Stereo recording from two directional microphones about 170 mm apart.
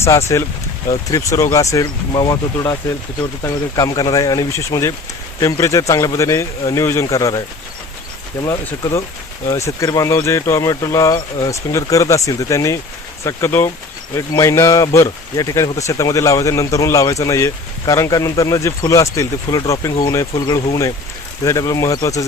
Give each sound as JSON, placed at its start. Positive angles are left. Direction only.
{"t": 0.0, "sound": "speech", "side_deg": 15}
{"t": 8.4, "sound": "speech", "side_deg": 20}